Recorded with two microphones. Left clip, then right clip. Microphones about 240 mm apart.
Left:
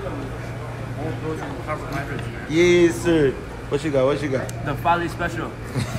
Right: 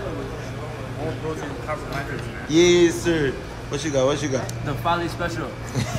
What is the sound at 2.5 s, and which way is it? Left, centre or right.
A man's voice, centre.